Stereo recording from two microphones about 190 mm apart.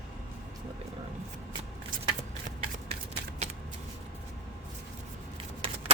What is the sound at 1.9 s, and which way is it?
Scissors, 45° right (ahead or behind).